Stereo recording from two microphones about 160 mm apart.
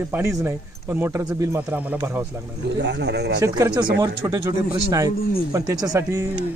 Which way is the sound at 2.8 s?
90° right.